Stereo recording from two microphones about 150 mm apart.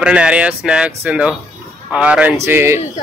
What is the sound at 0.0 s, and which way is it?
A man's voice, 5° right (ahead or behind).